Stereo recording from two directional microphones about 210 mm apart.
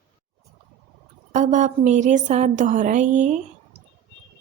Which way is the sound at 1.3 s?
35° right (ahead or behind).